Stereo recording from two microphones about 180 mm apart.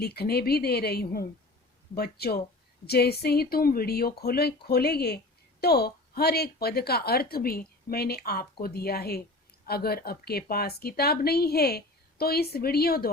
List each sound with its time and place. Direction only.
0.0 s speech: 60° left (ahead or behind)